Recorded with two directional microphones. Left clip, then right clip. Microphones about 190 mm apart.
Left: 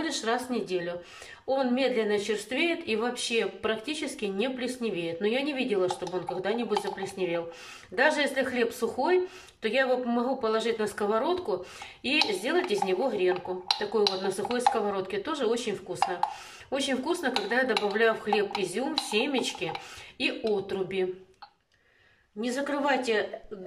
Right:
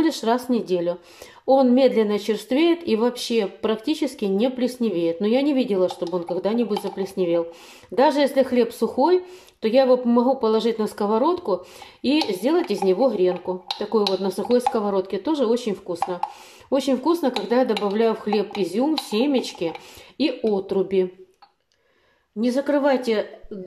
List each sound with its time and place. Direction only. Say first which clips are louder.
0.0 s speech: right 8 dB; 30° right (ahead or behind)
22.4 s speech: right 9 dB; 30° right (ahead or behind)